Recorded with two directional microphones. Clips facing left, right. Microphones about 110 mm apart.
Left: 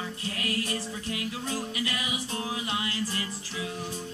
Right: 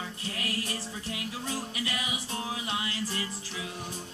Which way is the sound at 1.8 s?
20° right (ahead or behind).